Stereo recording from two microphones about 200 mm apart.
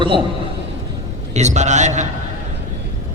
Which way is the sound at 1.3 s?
35° right (ahead or behind).